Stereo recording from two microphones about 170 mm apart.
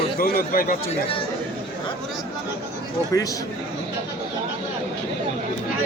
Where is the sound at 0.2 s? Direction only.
60° left (ahead or behind).